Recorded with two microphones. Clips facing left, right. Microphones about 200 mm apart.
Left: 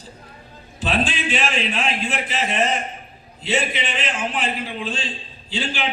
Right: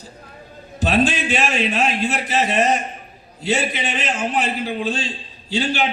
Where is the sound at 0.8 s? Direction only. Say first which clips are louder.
Right 5 dB; 45° right (ahead or behind).